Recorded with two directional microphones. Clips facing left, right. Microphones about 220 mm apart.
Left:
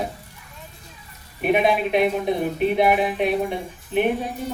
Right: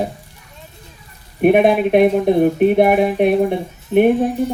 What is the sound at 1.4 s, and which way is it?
Speech, 50° right (ahead or behind).